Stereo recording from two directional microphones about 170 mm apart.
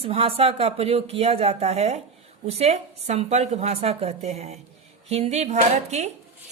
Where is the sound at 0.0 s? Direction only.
35° right (ahead or behind).